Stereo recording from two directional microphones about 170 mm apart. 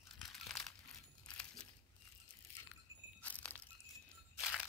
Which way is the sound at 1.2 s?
5° left (ahead or behind).